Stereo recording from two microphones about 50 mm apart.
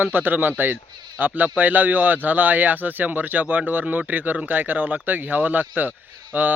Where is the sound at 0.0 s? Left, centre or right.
Right.